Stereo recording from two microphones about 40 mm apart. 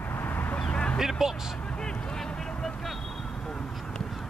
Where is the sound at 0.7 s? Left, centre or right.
Left.